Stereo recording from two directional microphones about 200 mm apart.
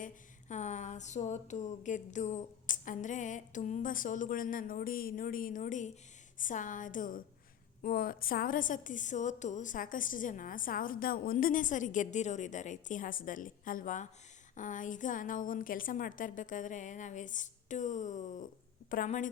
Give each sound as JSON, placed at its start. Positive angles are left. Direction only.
{"t": 0.0, "sound": "a woman's voice", "side_deg": 35}